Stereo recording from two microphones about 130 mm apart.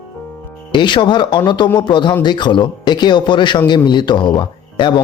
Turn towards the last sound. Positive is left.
turn(degrees=35)  # may be behind; listen again after turning